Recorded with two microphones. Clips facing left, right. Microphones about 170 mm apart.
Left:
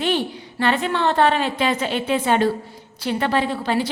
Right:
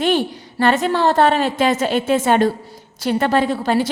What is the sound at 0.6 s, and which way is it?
A woman's voice, 45° right (ahead or behind).